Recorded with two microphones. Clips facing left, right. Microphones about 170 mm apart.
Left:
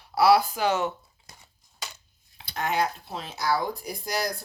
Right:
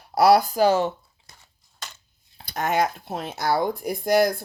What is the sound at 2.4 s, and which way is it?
Speech, 45° right (ahead or behind).